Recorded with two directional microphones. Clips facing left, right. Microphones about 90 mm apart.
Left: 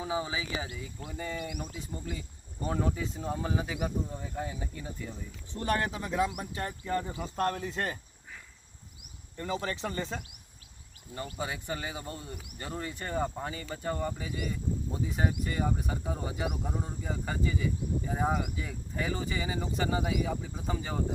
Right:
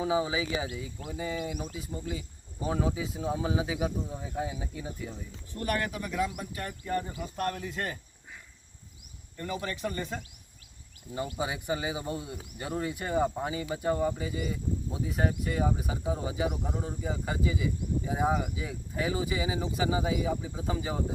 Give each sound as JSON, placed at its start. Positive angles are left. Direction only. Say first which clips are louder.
{"t": 0.0, "sound": "speech", "louder": "right 5 dB", "side_deg": -15}
{"t": 5.5, "sound": "speech", "louder": "left 1 dB", "side_deg": 30}
{"t": 9.4, "sound": "speech", "louder": "even", "side_deg": 25}
{"t": 11.3, "sound": "speech", "louder": "right 3 dB", "side_deg": -15}